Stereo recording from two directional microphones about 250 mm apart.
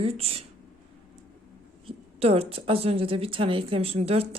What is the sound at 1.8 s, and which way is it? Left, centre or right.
A woman's voice, right.